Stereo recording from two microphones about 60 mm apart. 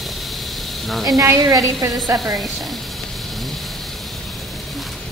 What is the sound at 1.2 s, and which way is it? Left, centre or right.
Speech, right.